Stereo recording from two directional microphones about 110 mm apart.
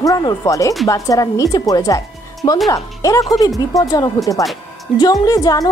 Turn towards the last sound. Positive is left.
turn(degrees=35)  # may be behind; listen again after turning